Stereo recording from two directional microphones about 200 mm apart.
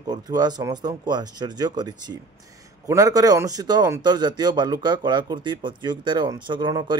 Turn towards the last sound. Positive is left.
turn(degrees=-20)  # may be behind; listen again after turning